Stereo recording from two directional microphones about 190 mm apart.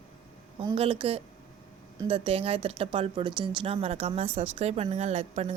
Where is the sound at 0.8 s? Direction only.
30° right (ahead or behind).